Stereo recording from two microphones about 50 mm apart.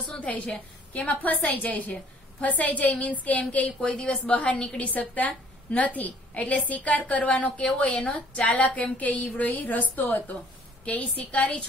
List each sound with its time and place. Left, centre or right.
0.9 s a woman's voice: left
3.9 s a woman's voice: centre